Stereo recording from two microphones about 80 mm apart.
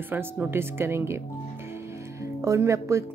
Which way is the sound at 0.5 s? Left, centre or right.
Right.